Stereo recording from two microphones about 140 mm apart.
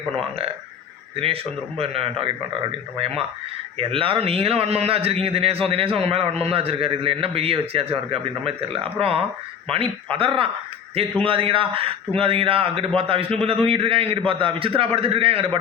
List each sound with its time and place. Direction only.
1.1 s a man's voice: 45° right (ahead or behind)